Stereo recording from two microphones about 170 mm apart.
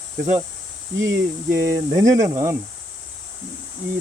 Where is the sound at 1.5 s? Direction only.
15° right (ahead or behind).